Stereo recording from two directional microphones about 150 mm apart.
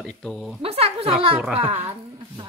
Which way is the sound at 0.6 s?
40° right (ahead or behind).